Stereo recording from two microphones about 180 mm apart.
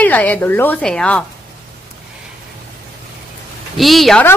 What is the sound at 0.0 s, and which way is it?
A woman's voice, 10° left (ahead or behind).